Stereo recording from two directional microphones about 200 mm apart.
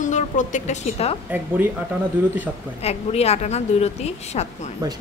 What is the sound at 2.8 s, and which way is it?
A woman's voice, 30° left (ahead or behind).